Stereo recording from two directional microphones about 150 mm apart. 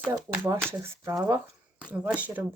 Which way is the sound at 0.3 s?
15° right (ahead or behind).